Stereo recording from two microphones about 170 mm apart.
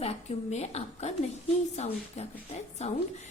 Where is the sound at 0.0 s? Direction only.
40° left (ahead or behind).